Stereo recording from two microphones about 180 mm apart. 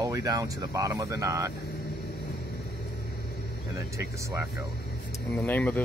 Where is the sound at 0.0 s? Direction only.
20° right (ahead or behind).